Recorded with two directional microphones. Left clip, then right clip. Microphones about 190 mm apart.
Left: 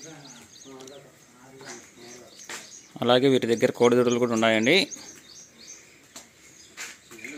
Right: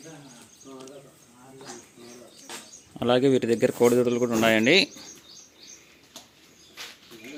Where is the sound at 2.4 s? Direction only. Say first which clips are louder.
Left 2 dB; 5° right (ahead or behind).